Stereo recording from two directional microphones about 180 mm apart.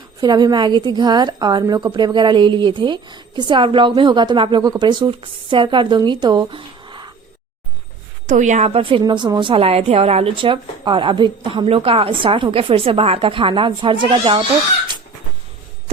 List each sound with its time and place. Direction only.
0.2 s a woman's voice: 25° right (ahead or behind)
8.3 s a woman's voice: 40° right (ahead or behind); by 14.4 s 25° right (ahead or behind)